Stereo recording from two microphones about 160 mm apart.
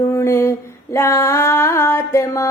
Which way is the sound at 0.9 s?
15° left (ahead or behind).